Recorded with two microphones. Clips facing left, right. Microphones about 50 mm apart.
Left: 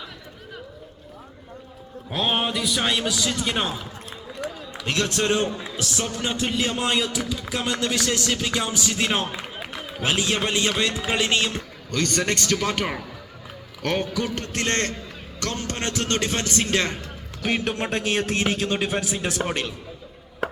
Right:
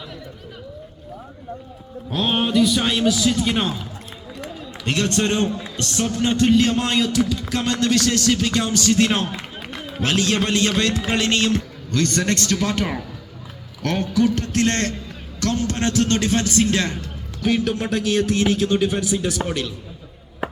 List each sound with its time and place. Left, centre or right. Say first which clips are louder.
2.0 s a man's voice: right 3 dB; centre
4.9 s a man's voice: right 2 dB; centre
11.9 s a man's voice: right 3 dB; left